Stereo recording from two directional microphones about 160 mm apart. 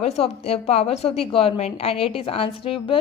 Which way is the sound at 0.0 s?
40° left (ahead or behind).